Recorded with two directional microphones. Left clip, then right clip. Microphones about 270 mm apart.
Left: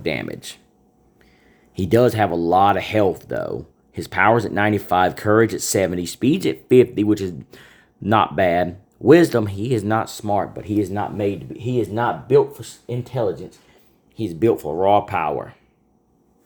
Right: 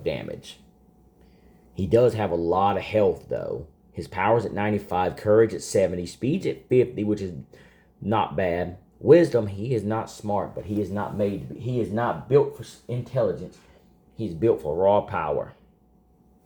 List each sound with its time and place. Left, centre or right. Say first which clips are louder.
0.0 s speech: left 4 dB; left
1.7 s speech: left 3 dB; left
14.2 s speech: left 4 dB; left